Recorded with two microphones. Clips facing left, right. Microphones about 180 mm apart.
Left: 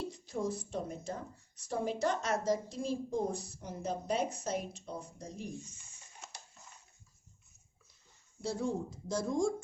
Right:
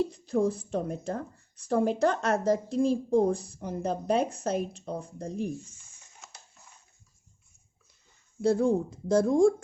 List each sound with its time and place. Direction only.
0.7 s a woman's voice: 60° right (ahead or behind)
8.4 s a woman's voice: 55° right (ahead or behind)